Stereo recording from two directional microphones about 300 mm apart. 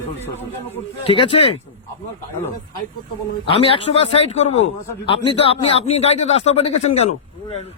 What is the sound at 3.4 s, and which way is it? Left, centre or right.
A man's voice, centre.